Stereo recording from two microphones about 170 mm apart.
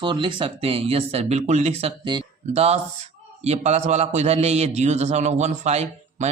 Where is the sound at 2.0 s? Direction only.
25° right (ahead or behind).